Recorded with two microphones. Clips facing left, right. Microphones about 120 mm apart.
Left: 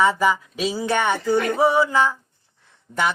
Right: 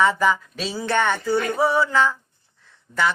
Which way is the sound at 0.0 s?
10° left (ahead or behind).